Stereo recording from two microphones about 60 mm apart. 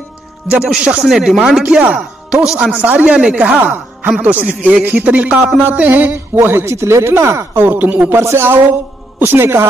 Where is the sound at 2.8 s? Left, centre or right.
Right.